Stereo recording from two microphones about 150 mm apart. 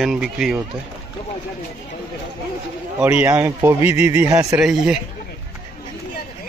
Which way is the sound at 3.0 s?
15° right (ahead or behind).